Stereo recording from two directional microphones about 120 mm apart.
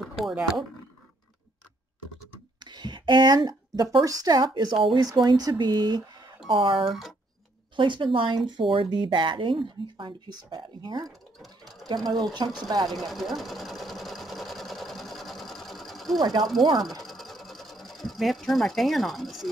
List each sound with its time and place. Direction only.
0.0 s speech: 5° right (ahead or behind)
2.6 s a woman's voice: 40° right (ahead or behind)
6.8 s speech: 5° right (ahead or behind)
7.7 s speech: 45° right (ahead or behind)
11.1 s sewing machine: centre (ahead or behind)
11.9 s speech: 35° right (ahead or behind)
12.8 s sewing machine: centre (ahead or behind)
16.2 s speech: 35° right (ahead or behind)
16.8 s a sound: centre (ahead or behind)